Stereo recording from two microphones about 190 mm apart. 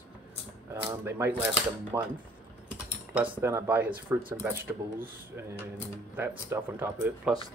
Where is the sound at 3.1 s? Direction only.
10° right (ahead or behind).